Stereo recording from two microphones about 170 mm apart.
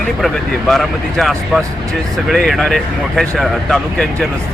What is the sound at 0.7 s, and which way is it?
Speech, centre (ahead or behind).